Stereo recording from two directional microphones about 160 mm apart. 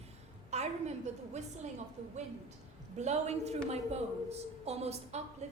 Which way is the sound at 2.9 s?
45° right (ahead or behind).